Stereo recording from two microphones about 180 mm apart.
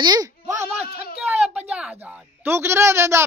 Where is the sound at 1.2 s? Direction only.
5° right (ahead or behind).